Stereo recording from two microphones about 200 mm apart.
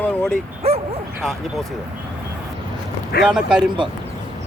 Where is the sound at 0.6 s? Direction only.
30° right (ahead or behind).